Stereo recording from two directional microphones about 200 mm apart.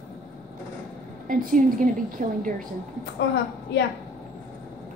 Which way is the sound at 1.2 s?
45° right (ahead or behind).